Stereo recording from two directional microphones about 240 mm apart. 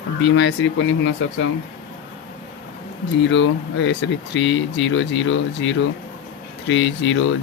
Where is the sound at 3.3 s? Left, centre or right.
Left.